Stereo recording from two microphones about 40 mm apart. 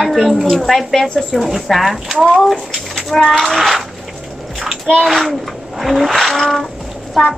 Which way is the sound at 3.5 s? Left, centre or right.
Centre.